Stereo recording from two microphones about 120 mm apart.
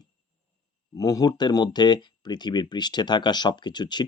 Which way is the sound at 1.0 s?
30° left (ahead or behind).